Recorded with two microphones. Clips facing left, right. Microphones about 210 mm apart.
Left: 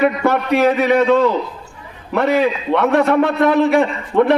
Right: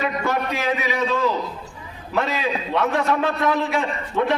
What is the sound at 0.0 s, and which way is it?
A man's voice, 60° left (ahead or behind).